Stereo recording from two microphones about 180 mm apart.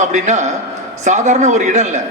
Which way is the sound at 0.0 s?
40° right (ahead or behind).